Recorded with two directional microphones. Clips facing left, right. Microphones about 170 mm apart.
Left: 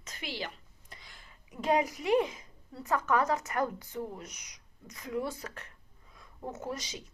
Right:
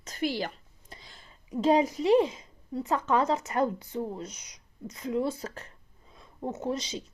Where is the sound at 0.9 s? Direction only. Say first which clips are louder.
Right 4 dB; 30° right (ahead or behind).